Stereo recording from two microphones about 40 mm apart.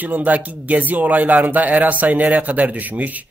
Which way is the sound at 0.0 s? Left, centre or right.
Right.